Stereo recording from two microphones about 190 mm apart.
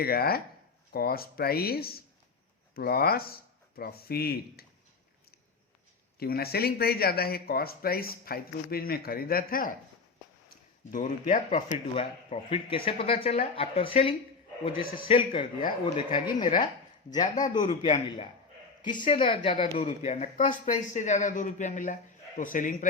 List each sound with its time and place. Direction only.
0.0 s speech: 55° left (ahead or behind)
6.1 s speech: 55° left (ahead or behind)
10.9 s speech: 40° left (ahead or behind)
11.9 s speech: 30° left (ahead or behind)
17.5 s speech: 25° left (ahead or behind); by 22.9 s 45° left (ahead or behind)